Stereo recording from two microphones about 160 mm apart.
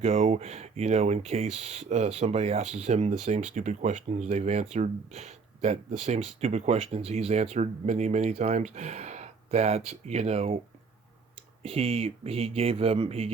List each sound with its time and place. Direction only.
0.0 s speech: 40° right (ahead or behind)
11.6 s speech: 35° right (ahead or behind)